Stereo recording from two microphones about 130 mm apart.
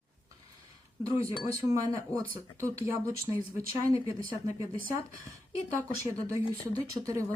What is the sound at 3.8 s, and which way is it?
Speech, 25° right (ahead or behind).